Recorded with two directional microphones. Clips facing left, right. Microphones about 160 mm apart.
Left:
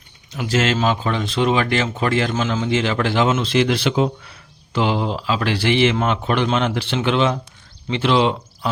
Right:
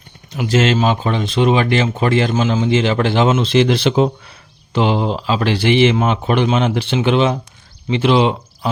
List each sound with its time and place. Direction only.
0.3 s speech: 20° right (ahead or behind)